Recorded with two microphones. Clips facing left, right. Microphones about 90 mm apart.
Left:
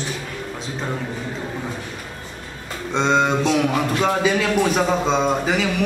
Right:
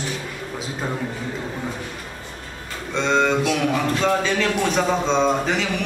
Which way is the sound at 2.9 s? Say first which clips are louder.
Left 1 dB; 20° left (ahead or behind).